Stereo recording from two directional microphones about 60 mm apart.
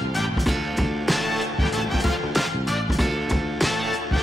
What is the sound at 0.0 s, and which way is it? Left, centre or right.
Music, centre.